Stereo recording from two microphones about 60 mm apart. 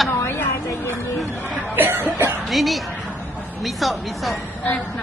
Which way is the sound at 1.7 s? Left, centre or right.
Right.